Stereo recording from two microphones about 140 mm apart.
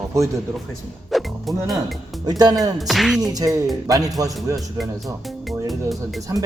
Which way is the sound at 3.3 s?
25° right (ahead or behind).